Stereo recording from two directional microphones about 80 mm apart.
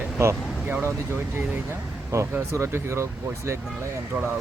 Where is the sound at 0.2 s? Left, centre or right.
Right.